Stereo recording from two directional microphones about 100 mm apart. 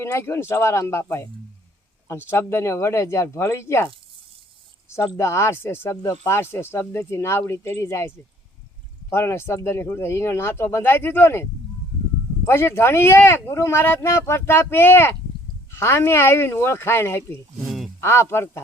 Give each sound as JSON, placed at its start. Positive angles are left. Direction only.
{"t": 0.0, "sound": "speech", "side_deg": 25}
{"t": 2.3, "sound": "speech", "side_deg": 25}
{"t": 4.9, "sound": "speech", "side_deg": 30}
{"t": 12.5, "sound": "speech", "side_deg": 25}
{"t": 17.6, "sound": "a sound", "side_deg": -5}
{"t": 18.0, "sound": "speech", "side_deg": 25}